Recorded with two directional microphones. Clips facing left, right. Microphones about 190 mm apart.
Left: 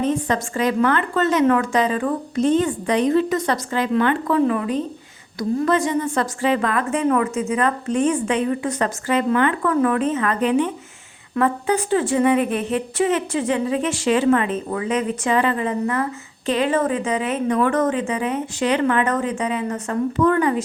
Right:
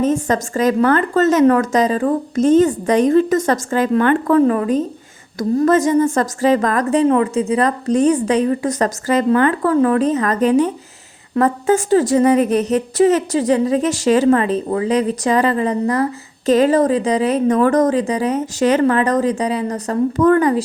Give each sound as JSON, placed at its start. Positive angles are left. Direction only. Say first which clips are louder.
{"t": 0.0, "sound": "a woman's voice", "louder": "right 4 dB", "side_deg": -45}